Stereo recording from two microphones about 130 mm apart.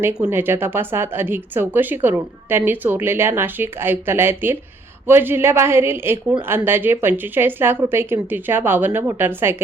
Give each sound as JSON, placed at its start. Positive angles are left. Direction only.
{"t": 0.0, "sound": "a woman's voice", "side_deg": -15}